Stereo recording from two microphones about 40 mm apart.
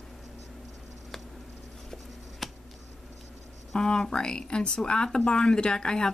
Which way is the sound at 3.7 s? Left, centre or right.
Centre.